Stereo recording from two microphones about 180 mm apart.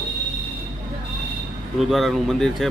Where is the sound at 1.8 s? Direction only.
Centre (ahead or behind).